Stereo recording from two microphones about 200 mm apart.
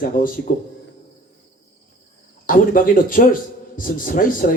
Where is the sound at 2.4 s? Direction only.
45° left (ahead or behind).